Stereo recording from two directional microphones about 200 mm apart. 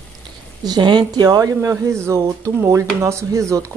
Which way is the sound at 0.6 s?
20° right (ahead or behind).